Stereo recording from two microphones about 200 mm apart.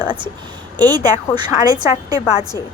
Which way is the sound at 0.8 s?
20° right (ahead or behind).